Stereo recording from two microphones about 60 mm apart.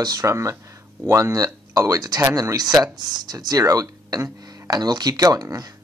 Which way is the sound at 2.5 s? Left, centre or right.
Right.